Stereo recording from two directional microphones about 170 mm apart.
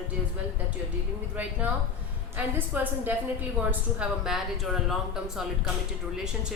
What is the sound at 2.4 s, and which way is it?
Speech, 10° right (ahead or behind).